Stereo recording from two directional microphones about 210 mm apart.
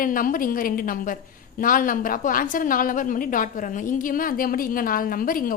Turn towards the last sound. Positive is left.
turn(degrees=40)  # may be behind; listen again after turning